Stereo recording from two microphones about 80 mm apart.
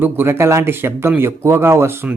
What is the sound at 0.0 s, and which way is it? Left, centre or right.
Speech, right.